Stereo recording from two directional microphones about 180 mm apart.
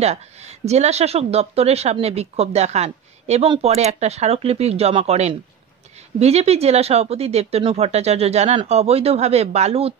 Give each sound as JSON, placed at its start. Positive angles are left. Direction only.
{"t": 0.0, "sound": "speech", "side_deg": -35}